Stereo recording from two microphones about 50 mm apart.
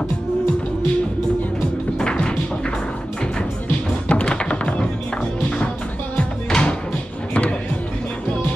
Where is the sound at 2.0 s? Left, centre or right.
Centre.